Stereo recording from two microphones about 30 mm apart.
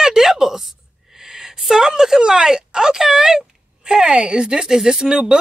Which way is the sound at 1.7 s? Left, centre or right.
Centre.